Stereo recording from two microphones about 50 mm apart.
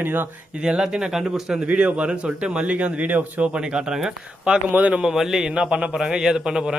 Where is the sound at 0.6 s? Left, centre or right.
Centre.